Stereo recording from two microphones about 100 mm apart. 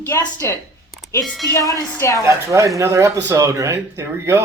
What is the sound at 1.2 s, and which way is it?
Speech, centre (ahead or behind).